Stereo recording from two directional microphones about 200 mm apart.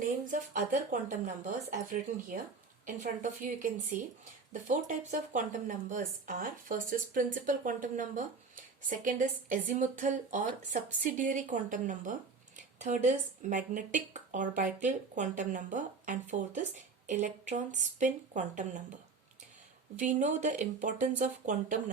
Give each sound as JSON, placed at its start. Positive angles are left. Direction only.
{"t": 0.0, "sound": "speech", "side_deg": -40}
{"t": 4.7, "sound": "a woman's voice", "side_deg": -40}
{"t": 20.0, "sound": "speech", "side_deg": -35}